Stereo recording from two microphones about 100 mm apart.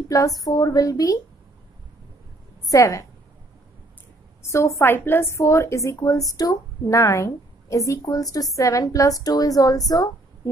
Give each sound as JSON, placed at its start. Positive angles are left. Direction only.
{"t": 0.1, "sound": "a woman's voice", "side_deg": 35}
{"t": 2.7, "sound": "a woman's voice", "side_deg": 30}
{"t": 4.4, "sound": "a woman's voice", "side_deg": 30}